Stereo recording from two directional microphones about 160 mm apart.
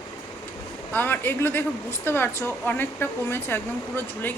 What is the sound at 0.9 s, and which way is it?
A woman's voice, 10° left (ahead or behind).